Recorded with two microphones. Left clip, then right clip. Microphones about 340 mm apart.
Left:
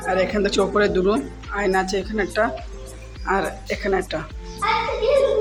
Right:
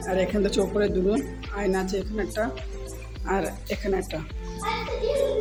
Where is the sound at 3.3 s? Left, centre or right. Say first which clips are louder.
Left 5 dB; right.